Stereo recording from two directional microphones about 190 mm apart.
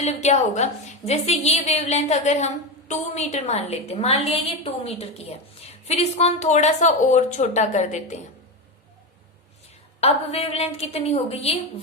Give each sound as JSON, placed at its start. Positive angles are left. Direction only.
{"t": 0.0, "sound": "a woman's voice", "side_deg": 35}
{"t": 10.0, "sound": "a woman's voice", "side_deg": 35}